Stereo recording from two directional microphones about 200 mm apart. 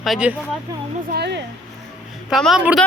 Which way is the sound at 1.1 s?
55° right (ahead or behind).